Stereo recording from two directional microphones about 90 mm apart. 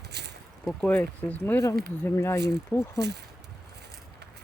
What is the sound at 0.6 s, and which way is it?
Speech, 10° left (ahead or behind).